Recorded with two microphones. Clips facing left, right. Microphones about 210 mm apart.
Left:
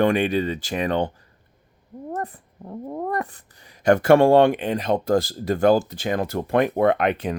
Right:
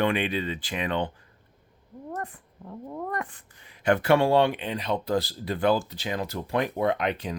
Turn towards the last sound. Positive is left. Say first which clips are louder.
# left 6 dB
turn(degrees=55)  # may be behind; listen again after turning